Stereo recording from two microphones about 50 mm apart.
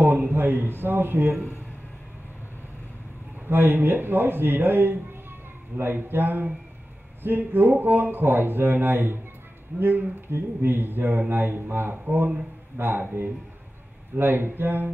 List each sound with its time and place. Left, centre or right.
0.0 s speech: right
3.4 s speech: right